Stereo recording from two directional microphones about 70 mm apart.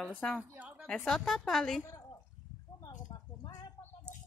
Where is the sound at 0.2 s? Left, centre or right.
Centre.